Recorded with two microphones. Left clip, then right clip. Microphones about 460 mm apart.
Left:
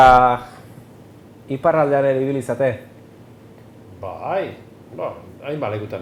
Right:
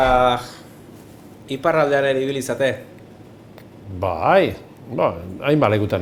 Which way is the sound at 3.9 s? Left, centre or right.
Right.